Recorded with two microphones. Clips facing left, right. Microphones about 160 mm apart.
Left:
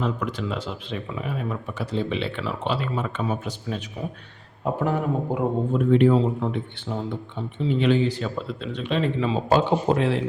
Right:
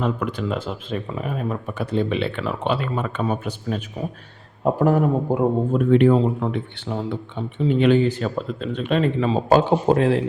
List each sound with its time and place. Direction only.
0.0 s speech: 55° right (ahead or behind)
4.6 s speech: 45° right (ahead or behind)
5.9 s speech: 60° right (ahead or behind)
7.6 s speech: 55° right (ahead or behind)